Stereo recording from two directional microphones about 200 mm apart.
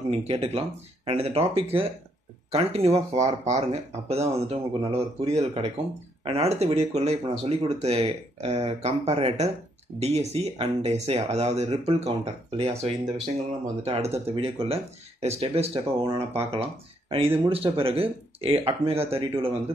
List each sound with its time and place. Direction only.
0.1 s speech: 30° right (ahead or behind)